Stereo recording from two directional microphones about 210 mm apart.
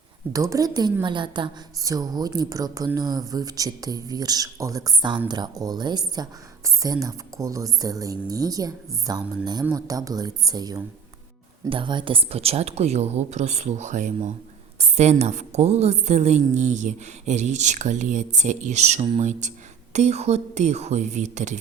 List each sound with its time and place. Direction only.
0.3 s a woman's voice: 15° right (ahead or behind); by 21.6 s 35° right (ahead or behind)